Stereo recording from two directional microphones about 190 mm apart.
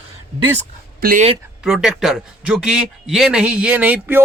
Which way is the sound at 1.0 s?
45° right (ahead or behind).